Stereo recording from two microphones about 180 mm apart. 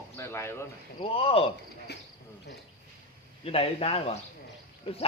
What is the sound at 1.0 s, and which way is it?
Speech, 30° left (ahead or behind).